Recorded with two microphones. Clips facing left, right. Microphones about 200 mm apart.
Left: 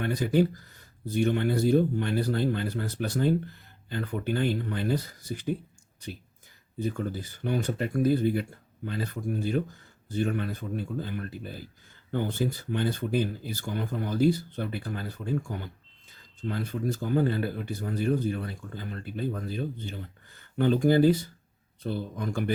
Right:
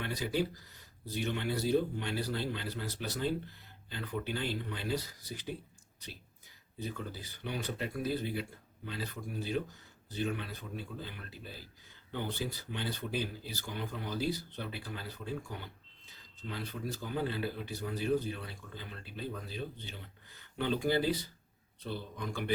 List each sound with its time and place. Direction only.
0.0 s speech: 50° left (ahead or behind)
6.7 s speech: 50° left (ahead or behind)